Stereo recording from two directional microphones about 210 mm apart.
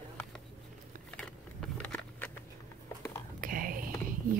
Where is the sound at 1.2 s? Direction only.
5° left (ahead or behind).